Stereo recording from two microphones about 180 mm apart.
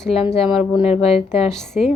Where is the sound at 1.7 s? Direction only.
5° right (ahead or behind).